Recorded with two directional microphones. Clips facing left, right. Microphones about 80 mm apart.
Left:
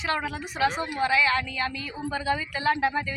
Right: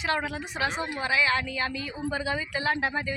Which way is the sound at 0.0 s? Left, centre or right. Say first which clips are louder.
Even; right.